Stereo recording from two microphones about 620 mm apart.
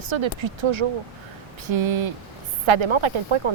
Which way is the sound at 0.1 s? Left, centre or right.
Right.